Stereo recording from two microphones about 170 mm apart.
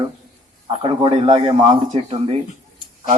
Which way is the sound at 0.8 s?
35° right (ahead or behind).